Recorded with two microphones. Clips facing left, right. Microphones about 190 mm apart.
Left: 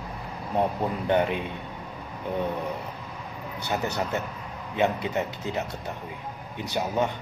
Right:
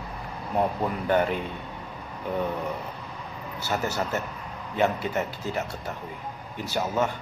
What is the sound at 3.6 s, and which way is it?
A man's voice, 15° left (ahead or behind).